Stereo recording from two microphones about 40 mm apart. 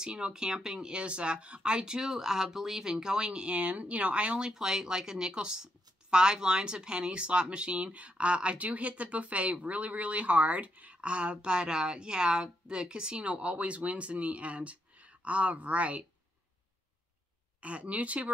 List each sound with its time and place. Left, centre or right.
0.0 s speech: right
4.5 s speech: centre; by 16.1 s right
17.6 s speech: right